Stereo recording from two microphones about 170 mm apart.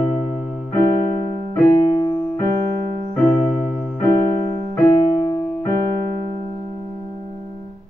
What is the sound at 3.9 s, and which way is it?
Keyboard, 20° left (ahead or behind).